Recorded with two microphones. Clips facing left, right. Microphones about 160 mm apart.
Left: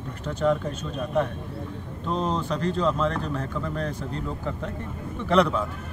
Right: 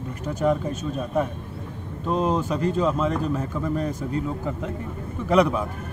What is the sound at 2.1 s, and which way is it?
Speech, 5° right (ahead or behind).